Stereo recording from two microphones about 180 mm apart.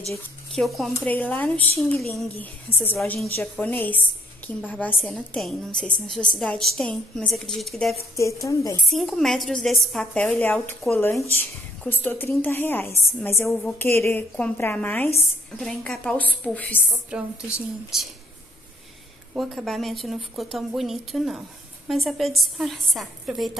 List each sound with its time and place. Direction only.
0.6 s a woman's voice: centre (ahead or behind)
0.9 s a woman's voice: 10° left (ahead or behind)
8.2 s a woman's voice: 15° left (ahead or behind)
8.8 s a woman's voice: centre (ahead or behind)
17.1 s a woman's voice: 5° right (ahead or behind)
19.3 s a woman's voice: centre (ahead or behind)